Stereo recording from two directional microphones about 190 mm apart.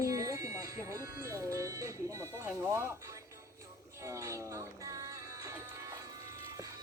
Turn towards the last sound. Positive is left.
turn(degrees=-15)  # may be behind; listen again after turning